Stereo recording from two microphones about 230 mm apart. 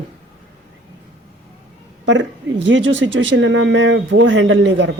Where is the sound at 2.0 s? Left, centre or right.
Right.